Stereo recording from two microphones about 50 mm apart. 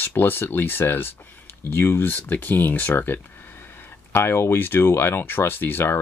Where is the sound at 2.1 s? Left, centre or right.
Left.